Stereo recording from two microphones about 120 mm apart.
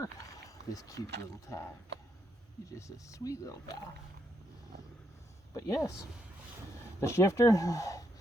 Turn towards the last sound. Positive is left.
turn(degrees=30)  # may be behind; listen again after turning